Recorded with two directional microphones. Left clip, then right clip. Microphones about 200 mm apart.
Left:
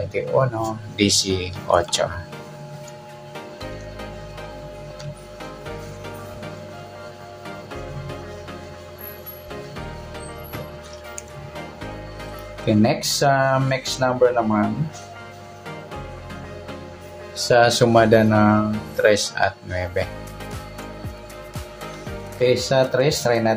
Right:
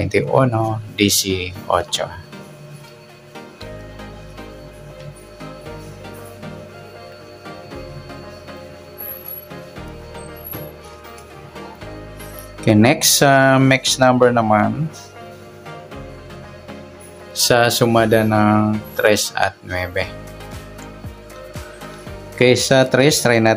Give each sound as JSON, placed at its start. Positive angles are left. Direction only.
{"t": 0.6, "sound": "speech", "side_deg": -10}
{"t": 12.6, "sound": "speech", "side_deg": -35}
{"t": 17.5, "sound": "speech", "side_deg": -15}
{"t": 22.4, "sound": "speech", "side_deg": -35}